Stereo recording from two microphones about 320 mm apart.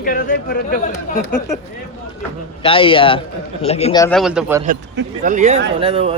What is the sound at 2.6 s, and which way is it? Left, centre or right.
A man's voice, centre.